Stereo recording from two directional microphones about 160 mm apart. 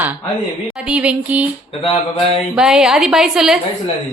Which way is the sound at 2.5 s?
5° right (ahead or behind).